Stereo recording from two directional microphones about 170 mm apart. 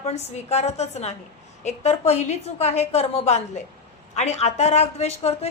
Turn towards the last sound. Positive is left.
turn(degrees=35)  # may be behind; listen again after turning